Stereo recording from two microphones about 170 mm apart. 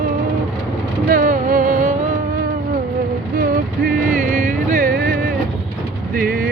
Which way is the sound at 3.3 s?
55° right (ahead or behind).